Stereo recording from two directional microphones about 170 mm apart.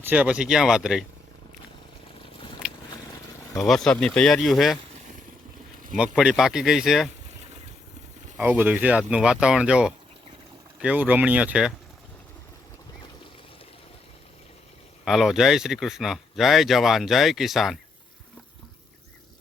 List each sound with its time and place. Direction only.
0.0 s speech: 10° right (ahead or behind)
3.7 s speech: 5° left (ahead or behind)
6.0 s speech: 5° right (ahead or behind)
8.4 s speech: 10° right (ahead or behind)
15.0 s speech: centre (ahead or behind)